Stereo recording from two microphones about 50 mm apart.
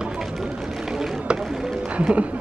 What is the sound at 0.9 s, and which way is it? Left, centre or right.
Run, centre.